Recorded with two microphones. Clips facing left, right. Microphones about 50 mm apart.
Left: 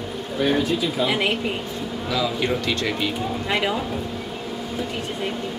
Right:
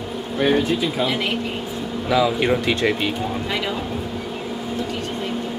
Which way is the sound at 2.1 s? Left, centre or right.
Right.